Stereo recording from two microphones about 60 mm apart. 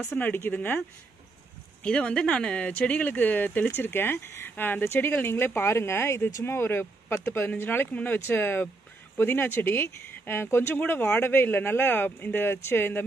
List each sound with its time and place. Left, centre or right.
0.0 s speech: left
1.8 s speech: centre; by 10.8 s left
10.8 s speech: left